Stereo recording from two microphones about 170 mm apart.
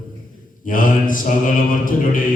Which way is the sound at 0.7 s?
50° left (ahead or behind).